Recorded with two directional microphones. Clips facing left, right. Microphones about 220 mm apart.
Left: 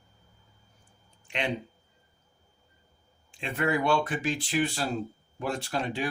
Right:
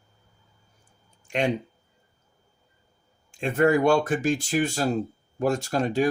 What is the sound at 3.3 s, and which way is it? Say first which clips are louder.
Speech: right 8 dB; 45° right (ahead or behind).